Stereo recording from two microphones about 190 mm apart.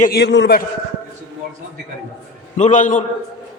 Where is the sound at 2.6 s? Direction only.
40° left (ahead or behind).